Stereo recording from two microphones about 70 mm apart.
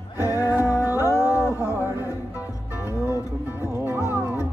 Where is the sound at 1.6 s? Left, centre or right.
Right.